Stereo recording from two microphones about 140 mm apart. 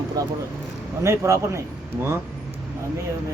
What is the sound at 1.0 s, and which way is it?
Speech, 20° right (ahead or behind).